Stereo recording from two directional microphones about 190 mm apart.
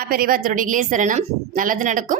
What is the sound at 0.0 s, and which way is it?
A woman's voice, 50° right (ahead or behind).